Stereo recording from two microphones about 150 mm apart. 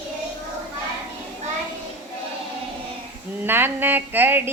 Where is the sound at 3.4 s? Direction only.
15° right (ahead or behind).